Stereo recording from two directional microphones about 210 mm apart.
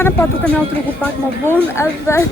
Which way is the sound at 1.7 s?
15° left (ahead or behind).